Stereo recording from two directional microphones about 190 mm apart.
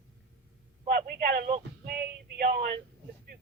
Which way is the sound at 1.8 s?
55° right (ahead or behind).